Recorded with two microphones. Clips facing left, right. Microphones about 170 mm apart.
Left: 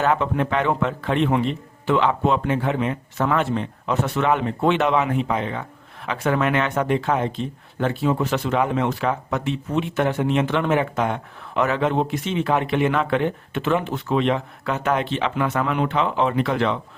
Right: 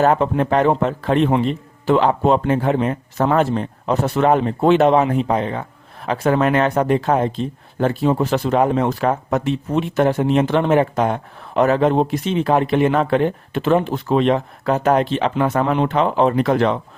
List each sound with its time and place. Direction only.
0.0 s speech: 40° right (ahead or behind)